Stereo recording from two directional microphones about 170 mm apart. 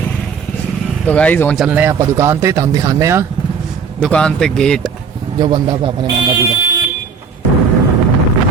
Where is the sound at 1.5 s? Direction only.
10° right (ahead or behind).